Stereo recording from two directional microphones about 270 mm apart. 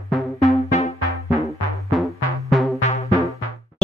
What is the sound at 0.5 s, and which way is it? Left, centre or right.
Music, left.